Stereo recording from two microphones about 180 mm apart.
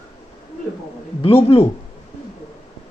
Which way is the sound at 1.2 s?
30° left (ahead or behind).